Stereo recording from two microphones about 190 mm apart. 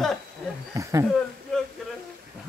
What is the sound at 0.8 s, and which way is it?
Speech, 15° right (ahead or behind).